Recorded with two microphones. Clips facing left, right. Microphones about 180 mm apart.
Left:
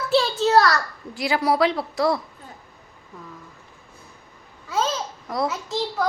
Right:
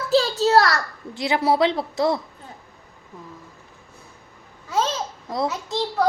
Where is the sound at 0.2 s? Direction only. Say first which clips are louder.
Even; 35° right (ahead or behind).